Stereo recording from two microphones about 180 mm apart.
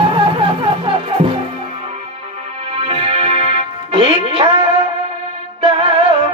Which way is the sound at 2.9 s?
30° right (ahead or behind).